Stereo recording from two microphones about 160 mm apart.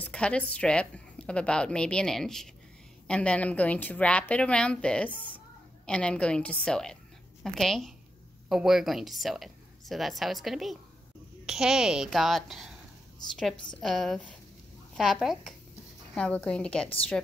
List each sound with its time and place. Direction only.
0.0 s a woman's voice: 5° left (ahead or behind)
13.7 s a woman's voice: centre (ahead or behind)